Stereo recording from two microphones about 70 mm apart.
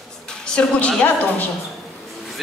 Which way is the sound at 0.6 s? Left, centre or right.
Centre.